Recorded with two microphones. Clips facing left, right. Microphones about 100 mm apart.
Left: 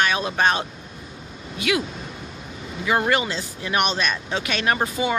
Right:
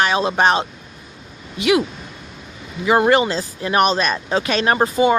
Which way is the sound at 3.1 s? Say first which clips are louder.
Right 7 dB; 35° right (ahead or behind).